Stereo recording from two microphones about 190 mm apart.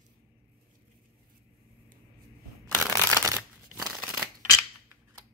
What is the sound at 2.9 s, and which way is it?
Shuffling cards, 15° right (ahead or behind).